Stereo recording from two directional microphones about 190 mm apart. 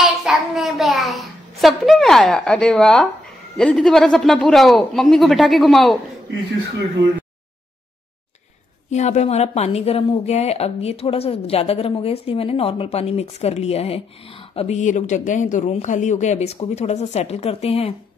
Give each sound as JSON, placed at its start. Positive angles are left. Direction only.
{"t": 0.0, "sound": "a child's voice", "side_deg": 0}
{"t": 8.9, "sound": "speech", "side_deg": 35}